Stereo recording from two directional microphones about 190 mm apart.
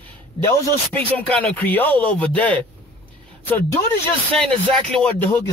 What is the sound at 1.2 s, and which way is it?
Speech, 10° left (ahead or behind).